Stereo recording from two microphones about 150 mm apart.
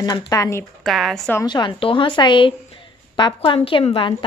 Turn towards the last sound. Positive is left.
turn(degrees=35)  # may be behind; listen again after turning